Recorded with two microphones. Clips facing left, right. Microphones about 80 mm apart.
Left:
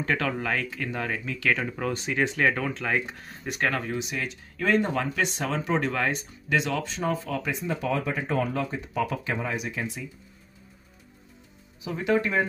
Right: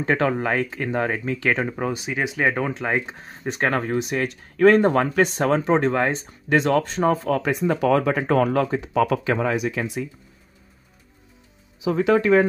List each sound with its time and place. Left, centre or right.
0.0 s speech: right
1.9 s speech: centre; by 6.2 s right
6.5 s speech: right
7.6 s speech: right
11.8 s speech: right